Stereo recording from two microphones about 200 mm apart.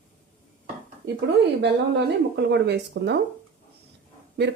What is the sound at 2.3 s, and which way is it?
Speech, 55° right (ahead or behind).